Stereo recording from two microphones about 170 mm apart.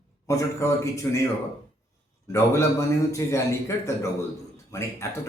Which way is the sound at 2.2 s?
15° left (ahead or behind).